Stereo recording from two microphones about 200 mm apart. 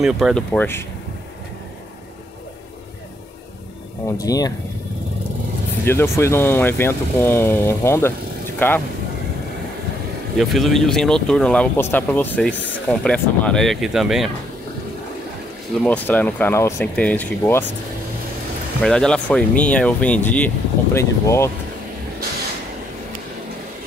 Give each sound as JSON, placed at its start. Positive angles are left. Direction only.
{"t": 0.0, "sound": "speech", "side_deg": 0}
{"t": 4.2, "sound": "speech", "side_deg": 20}
{"t": 5.9, "sound": "speech", "side_deg": 10}
{"t": 10.3, "sound": "speech", "side_deg": 0}
{"t": 15.8, "sound": "speech", "side_deg": 5}
{"t": 18.8, "sound": "speech", "side_deg": 5}